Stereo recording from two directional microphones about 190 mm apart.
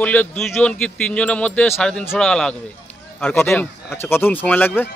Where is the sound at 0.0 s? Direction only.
10° left (ahead or behind).